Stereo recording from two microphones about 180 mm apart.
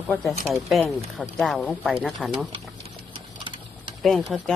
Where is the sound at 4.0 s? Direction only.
Centre (ahead or behind).